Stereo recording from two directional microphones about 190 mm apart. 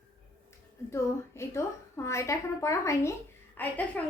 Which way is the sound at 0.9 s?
15° left (ahead or behind).